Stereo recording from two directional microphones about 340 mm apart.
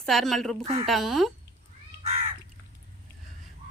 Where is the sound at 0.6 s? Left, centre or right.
Centre.